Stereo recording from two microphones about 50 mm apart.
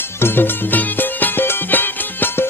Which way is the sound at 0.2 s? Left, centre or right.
Left.